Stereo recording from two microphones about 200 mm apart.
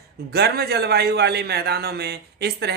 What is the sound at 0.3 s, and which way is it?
A woman's voice, 55° right (ahead or behind).